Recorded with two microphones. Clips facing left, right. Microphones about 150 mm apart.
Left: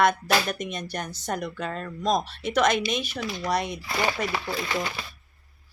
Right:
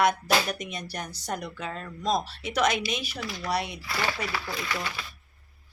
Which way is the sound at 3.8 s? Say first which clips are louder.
Left 4 dB; 20° left (ahead or behind).